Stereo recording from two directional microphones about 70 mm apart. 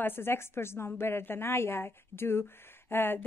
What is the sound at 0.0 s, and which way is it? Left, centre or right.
A woman's voice, left.